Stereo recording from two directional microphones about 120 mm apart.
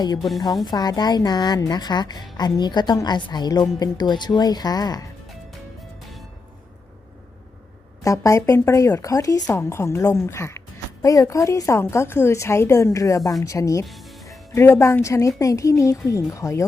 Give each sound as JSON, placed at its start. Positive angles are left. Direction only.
{"t": 0.2, "sound": "a woman's voice", "side_deg": 0}
{"t": 0.6, "sound": "a woman's voice", "side_deg": 35}
{"t": 8.0, "sound": "speech", "side_deg": 25}
{"t": 13.8, "sound": "music", "side_deg": 0}
{"t": 14.3, "sound": "speech", "side_deg": 20}